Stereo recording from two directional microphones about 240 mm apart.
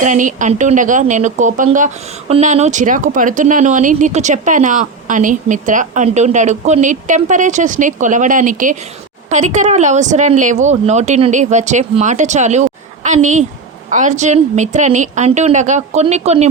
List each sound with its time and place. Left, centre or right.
0.0 s speech: right